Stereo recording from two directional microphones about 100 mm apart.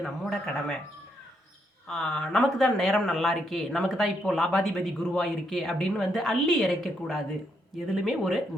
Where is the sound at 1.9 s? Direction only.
5° left (ahead or behind).